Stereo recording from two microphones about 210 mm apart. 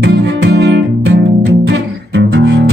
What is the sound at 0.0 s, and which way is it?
Music, 60° right (ahead or behind).